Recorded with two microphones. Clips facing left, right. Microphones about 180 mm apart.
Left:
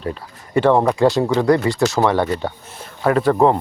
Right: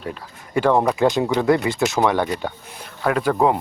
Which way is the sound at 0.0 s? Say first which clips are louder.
Left 4 dB; 5° right (ahead or behind).